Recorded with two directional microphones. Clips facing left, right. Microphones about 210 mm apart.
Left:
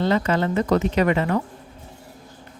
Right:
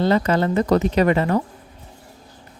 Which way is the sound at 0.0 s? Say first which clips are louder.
Right 2 dB; 35° right (ahead or behind).